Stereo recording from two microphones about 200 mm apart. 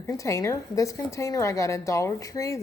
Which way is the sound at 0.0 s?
15° left (ahead or behind).